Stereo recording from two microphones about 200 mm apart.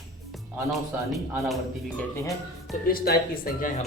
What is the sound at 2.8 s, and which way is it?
Speech, 50° left (ahead or behind).